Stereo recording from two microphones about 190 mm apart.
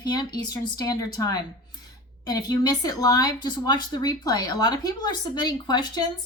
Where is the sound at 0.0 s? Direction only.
20° left (ahead or behind).